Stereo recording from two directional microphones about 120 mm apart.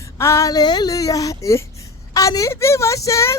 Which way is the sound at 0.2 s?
25° left (ahead or behind).